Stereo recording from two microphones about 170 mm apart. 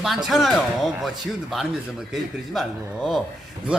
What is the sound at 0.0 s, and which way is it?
Speech, centre (ahead or behind).